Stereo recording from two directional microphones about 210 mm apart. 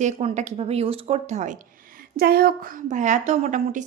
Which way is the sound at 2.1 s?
45° right (ahead or behind).